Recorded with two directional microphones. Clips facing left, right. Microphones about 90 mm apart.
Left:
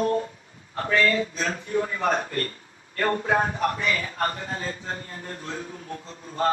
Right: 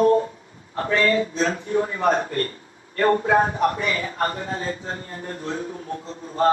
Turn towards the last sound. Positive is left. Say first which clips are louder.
# right 5 dB
turn(degrees=-30)  # may be behind; listen again after turning